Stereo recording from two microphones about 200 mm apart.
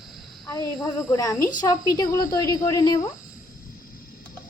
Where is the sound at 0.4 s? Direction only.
15° left (ahead or behind).